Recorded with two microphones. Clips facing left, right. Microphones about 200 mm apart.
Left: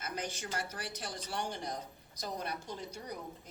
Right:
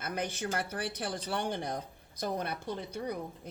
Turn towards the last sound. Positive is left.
turn(degrees=-60)  # may be behind; listen again after turning